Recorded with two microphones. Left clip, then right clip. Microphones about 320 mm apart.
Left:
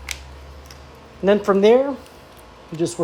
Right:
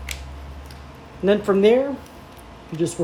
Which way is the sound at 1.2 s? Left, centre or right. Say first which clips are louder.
Left 2 dB; centre.